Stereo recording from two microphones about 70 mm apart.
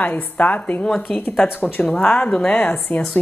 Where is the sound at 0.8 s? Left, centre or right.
Centre.